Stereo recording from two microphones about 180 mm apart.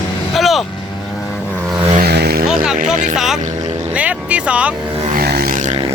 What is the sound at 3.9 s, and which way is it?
Speech, 10° right (ahead or behind).